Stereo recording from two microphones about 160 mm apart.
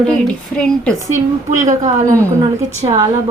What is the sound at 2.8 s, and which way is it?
Speech, 30° right (ahead or behind).